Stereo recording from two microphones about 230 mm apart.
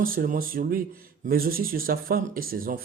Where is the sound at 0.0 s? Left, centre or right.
Right.